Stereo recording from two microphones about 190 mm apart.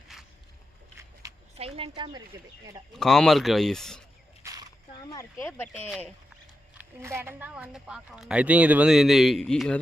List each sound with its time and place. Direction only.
0.1 s boat: centre (ahead or behind)
1.5 s speech: 30° right (ahead or behind)
2.3 s speech: 20° right (ahead or behind)
2.9 s speech: centre (ahead or behind)
4.4 s a sound: 20° right (ahead or behind)
4.9 s speech: 15° left (ahead or behind)
5.9 s speech: centre (ahead or behind)
6.7 s speech: 15° right (ahead or behind); by 9.7 s 5° left (ahead or behind)